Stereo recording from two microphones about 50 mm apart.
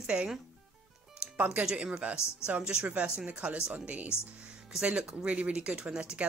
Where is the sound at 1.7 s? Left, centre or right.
Right.